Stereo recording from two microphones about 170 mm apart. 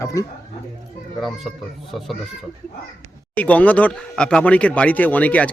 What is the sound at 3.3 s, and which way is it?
Speech, 10° left (ahead or behind).